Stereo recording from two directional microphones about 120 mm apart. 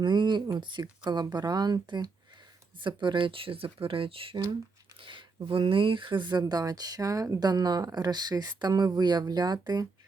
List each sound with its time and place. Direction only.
0.0 s speech: 40° right (ahead or behind)